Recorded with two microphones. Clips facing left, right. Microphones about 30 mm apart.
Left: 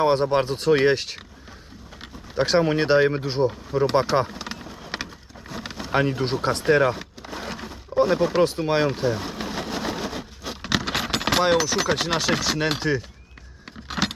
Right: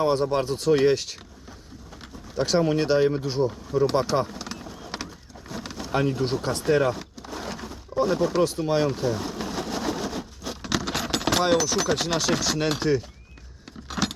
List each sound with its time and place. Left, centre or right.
0.0 s speech: left
4.3 s vehicle: left
5.5 s speech: centre
6.9 s a sound: left
7.9 s speech: left
8.4 s vehicle: left
11.3 s speech: left
13.8 s vehicle: left